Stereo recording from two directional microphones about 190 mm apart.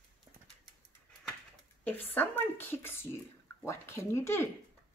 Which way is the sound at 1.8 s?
10° left (ahead or behind).